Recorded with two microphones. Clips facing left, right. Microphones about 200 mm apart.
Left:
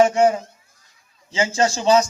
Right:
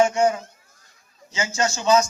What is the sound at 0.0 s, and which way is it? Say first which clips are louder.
Speech: left 3 dB; 35° left (ahead or behind).